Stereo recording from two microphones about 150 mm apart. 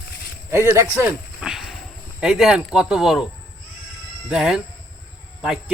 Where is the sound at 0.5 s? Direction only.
20° right (ahead or behind).